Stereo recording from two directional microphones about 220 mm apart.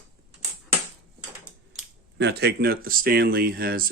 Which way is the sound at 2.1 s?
50° right (ahead or behind).